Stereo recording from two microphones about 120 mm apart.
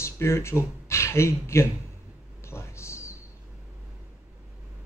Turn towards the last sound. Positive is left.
turn(degrees=25)  # may be behind; listen again after turning